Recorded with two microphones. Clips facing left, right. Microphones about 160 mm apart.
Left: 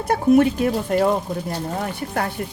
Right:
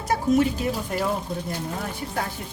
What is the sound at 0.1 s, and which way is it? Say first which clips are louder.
Speech: left 5 dB; 55° left (ahead or behind).